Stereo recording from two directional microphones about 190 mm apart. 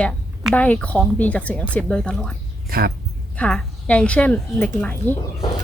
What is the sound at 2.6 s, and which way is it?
Speech, 50° right (ahead or behind).